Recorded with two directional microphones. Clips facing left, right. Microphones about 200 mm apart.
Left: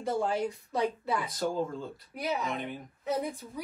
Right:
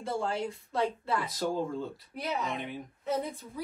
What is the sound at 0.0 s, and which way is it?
Speech, 15° left (ahead or behind).